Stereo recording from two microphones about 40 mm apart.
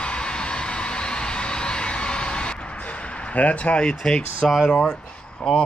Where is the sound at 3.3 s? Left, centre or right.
Left.